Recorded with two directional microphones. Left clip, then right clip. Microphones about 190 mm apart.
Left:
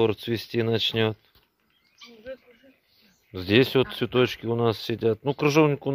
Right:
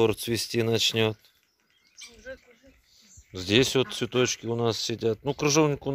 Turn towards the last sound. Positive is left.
turn(degrees=0)  # may be behind; listen again after turning